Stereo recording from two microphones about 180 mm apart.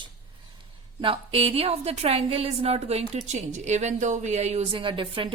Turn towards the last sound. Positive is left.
turn(degrees=-30)  # may be behind; listen again after turning